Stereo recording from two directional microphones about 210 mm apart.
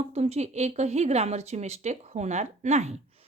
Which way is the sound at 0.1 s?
30° right (ahead or behind).